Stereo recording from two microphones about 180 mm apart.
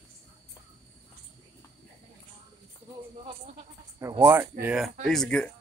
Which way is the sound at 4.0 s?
15° right (ahead or behind).